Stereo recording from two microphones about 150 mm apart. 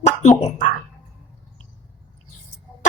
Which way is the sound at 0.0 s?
50° left (ahead or behind).